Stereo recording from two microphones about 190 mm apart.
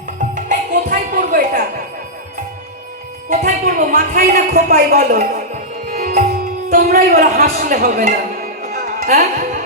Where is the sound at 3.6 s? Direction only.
50° right (ahead or behind).